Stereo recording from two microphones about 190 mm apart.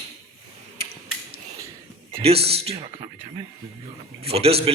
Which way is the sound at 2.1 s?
30° right (ahead or behind).